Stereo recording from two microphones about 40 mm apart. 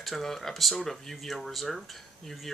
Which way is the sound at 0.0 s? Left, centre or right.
Centre.